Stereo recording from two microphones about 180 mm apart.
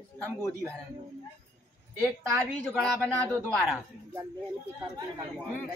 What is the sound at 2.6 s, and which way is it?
Speech, centre (ahead or behind).